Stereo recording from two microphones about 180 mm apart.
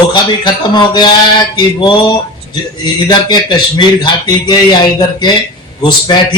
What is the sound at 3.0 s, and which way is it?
A man's voice, 25° left (ahead or behind).